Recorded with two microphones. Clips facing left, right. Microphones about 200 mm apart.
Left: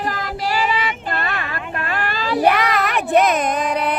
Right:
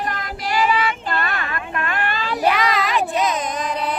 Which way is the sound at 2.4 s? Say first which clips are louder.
Left 1 dB; 55° left (ahead or behind).